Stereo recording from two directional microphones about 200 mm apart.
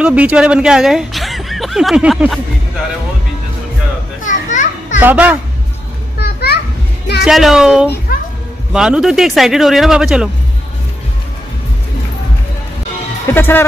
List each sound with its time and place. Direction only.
0.0 s speech: 5° right (ahead or behind)
4.2 s children playing: 40° left (ahead or behind)
5.0 s a child's voice: 10° right (ahead or behind)
6.1 s children playing: 50° left (ahead or behind)
7.2 s speech: centre (ahead or behind)
13.3 s speech: 10° left (ahead or behind)